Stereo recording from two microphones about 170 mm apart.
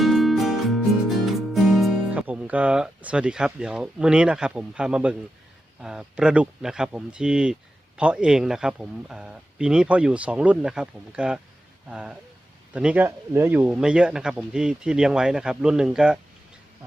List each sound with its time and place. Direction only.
0.0 s music: centre (ahead or behind)
1.1 s speech: centre (ahead or behind)